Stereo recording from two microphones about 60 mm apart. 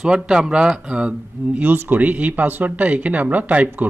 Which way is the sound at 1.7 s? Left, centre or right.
Right.